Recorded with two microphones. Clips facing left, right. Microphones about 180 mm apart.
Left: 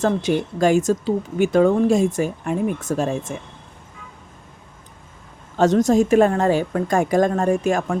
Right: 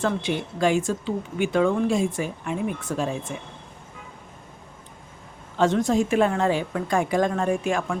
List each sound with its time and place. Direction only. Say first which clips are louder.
0.0 s speech: left 6 dB; 40° left (ahead or behind)
5.5 s speech: left 5 dB; 40° left (ahead or behind)